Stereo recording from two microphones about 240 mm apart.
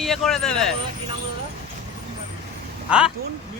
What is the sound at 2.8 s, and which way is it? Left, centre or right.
Speech, centre.